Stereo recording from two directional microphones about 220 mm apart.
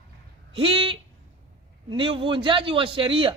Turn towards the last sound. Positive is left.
turn(degrees=-25)  # may be behind; listen again after turning